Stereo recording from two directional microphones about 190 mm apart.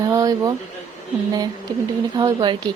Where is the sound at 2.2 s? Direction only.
25° right (ahead or behind).